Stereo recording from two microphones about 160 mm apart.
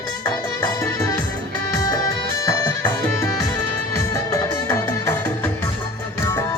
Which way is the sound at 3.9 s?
20° left (ahead or behind).